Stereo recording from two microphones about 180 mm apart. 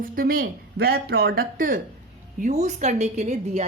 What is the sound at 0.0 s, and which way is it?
Speech, 55° right (ahead or behind).